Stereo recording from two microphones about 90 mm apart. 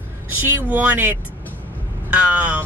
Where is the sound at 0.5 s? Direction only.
20° right (ahead or behind).